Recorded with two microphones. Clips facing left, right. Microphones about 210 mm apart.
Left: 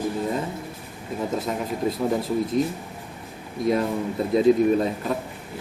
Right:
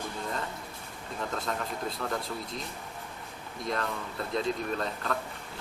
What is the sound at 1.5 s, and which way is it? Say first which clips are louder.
Speech: left 8 dB; 15° left (ahead or behind).